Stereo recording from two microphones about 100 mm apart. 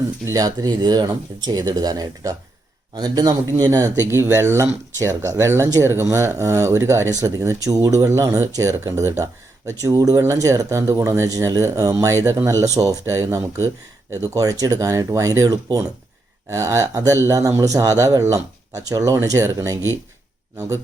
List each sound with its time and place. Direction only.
0.3 s speech: 40° right (ahead or behind)